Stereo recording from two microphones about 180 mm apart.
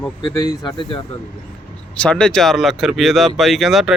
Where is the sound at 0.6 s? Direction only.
25° left (ahead or behind).